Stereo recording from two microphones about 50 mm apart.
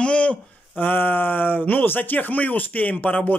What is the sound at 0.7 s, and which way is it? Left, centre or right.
Speech, left.